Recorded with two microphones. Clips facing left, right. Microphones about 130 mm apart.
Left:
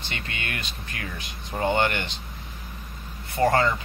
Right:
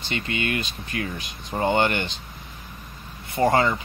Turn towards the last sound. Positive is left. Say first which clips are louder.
# right 1 dB
turn(degrees=-20)  # may be behind; listen again after turning